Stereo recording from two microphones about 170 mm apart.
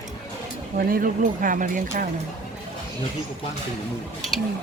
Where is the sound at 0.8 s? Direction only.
55° right (ahead or behind).